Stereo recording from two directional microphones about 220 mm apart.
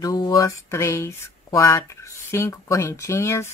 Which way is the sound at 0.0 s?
15° left (ahead or behind).